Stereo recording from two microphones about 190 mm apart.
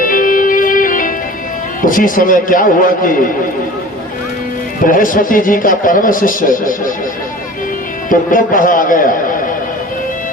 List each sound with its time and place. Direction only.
0.0 s music: 45° left (ahead or behind)
1.8 s a man's voice: 45° left (ahead or behind)
4.9 s a man's voice: 45° left (ahead or behind)
8.1 s a man's voice: 45° left (ahead or behind)